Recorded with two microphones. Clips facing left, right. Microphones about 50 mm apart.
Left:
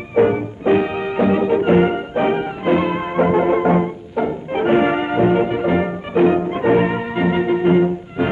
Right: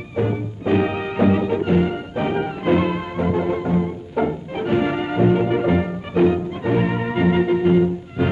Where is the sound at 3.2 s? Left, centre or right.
Left; by 5.8 s centre.